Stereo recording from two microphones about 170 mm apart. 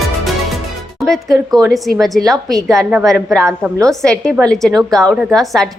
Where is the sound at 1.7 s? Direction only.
Centre (ahead or behind).